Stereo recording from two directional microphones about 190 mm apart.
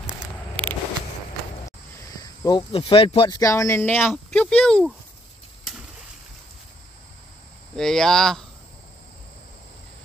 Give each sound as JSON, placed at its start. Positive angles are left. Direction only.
{"t": 0.6, "sound": "a sound", "side_deg": -30}
{"t": 2.2, "sound": "speech", "side_deg": 20}
{"t": 7.7, "sound": "speech", "side_deg": 5}